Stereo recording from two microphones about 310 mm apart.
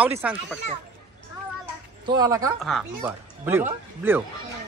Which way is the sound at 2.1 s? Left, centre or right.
Centre.